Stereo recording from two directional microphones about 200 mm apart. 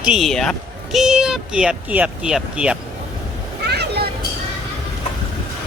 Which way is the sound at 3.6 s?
55° right (ahead or behind).